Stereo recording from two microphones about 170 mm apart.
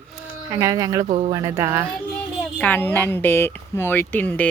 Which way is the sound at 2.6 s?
10° left (ahead or behind).